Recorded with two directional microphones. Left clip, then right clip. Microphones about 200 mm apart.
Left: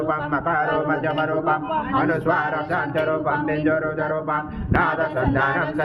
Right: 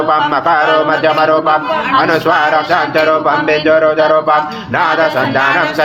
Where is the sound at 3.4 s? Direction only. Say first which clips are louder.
Right 12 dB; 50° right (ahead or behind).